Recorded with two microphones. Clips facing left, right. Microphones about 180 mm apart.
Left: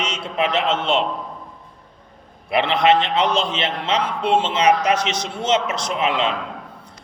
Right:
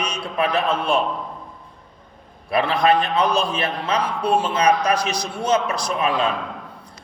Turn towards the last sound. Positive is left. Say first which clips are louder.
# even
turn(degrees=25)  # may be behind; listen again after turning